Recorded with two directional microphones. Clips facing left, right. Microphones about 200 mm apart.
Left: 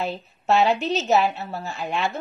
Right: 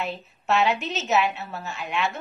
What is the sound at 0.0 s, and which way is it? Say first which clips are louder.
Child singing: left 3 dB; 35° left (ahead or behind).